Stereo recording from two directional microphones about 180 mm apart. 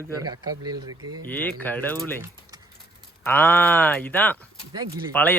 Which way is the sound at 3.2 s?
10° left (ahead or behind).